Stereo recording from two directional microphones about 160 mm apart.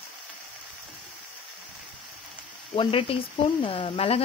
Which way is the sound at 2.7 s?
35° left (ahead or behind).